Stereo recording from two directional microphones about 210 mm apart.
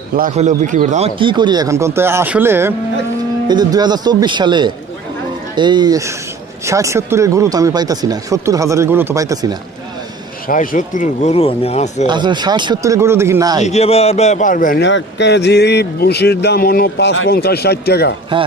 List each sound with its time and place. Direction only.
0.1 s speech: 35° right (ahead or behind); by 9.6 s 15° right (ahead or behind)
10.5 s speech: 40° left (ahead or behind)
12.1 s speech: 20° right (ahead or behind)
13.7 s speech: 30° left (ahead or behind)
14.8 s speech: 60° left (ahead or behind)